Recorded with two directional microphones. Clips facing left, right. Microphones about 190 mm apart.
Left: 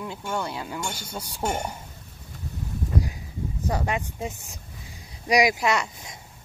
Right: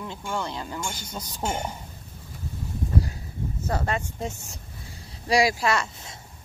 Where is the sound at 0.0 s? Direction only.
5° left (ahead or behind).